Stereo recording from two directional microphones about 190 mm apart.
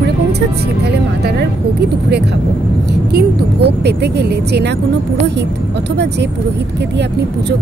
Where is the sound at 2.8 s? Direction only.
60° right (ahead or behind).